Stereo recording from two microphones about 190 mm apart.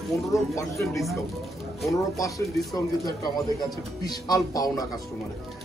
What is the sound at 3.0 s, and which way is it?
Speech, 20° left (ahead or behind).